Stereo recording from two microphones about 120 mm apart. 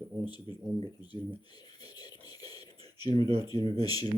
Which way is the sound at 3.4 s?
35° left (ahead or behind).